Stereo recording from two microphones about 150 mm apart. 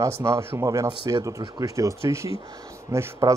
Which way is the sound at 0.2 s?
20° right (ahead or behind).